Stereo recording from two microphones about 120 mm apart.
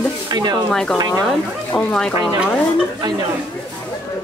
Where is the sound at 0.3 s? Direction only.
35° right (ahead or behind).